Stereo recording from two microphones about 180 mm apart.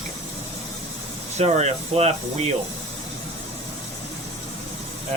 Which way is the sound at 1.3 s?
35° right (ahead or behind).